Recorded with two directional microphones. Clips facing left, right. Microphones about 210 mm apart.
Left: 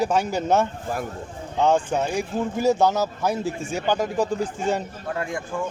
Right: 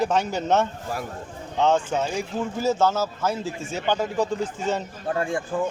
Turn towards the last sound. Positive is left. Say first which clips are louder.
# right 3 dB
turn(degrees=-30)  # may be behind; listen again after turning